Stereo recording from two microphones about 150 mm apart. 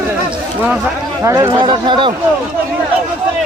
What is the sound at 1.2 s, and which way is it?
Speech, 20° right (ahead or behind).